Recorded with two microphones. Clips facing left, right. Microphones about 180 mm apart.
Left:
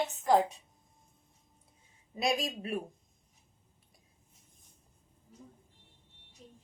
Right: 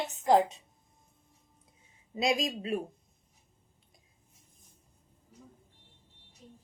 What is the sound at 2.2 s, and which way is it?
Speech, 20° right (ahead or behind).